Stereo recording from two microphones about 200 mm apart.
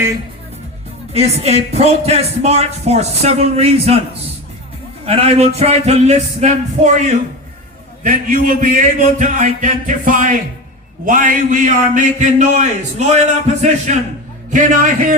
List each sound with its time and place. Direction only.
1.1 s speech: 30° right (ahead or behind)